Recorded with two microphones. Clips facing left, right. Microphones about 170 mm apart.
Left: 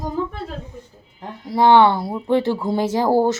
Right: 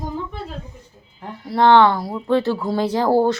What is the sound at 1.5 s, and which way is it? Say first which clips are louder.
Speech: even; 10° left (ahead or behind).